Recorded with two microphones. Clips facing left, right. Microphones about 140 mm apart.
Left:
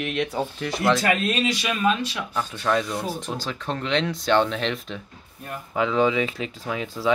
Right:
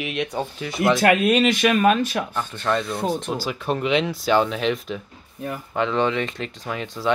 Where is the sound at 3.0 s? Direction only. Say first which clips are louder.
Right 5 dB; 65° right (ahead or behind).